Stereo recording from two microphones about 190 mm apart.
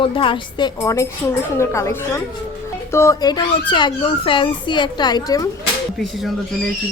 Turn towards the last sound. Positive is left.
turn(degrees=20)  # may be behind; listen again after turning